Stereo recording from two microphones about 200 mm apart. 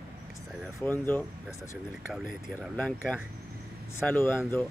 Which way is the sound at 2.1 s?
Centre (ahead or behind).